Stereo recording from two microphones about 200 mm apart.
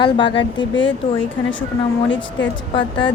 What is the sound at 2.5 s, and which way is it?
Speech, 25° left (ahead or behind).